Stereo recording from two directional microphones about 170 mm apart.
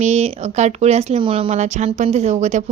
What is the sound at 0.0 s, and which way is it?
A woman's voice, 40° right (ahead or behind).